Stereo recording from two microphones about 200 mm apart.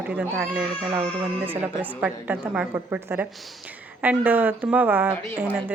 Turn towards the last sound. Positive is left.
turn(degrees=-10)  # may be behind; listen again after turning